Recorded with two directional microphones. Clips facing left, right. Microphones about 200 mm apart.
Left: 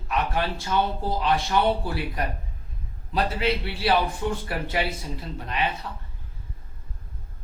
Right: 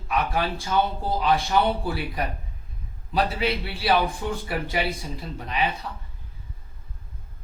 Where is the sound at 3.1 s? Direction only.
Centre (ahead or behind).